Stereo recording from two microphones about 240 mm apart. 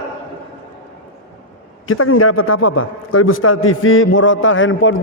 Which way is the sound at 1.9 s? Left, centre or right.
Left.